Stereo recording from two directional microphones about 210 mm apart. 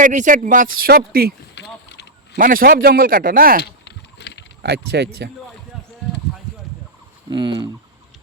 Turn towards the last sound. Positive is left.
turn(degrees=-20)  # may be behind; listen again after turning